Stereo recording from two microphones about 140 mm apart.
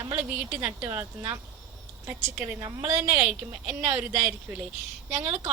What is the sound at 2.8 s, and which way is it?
A woman's voice, 15° right (ahead or behind).